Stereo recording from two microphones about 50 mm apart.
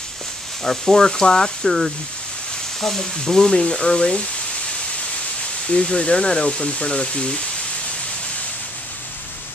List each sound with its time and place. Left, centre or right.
0.7 s speech: centre
5.7 s speech: centre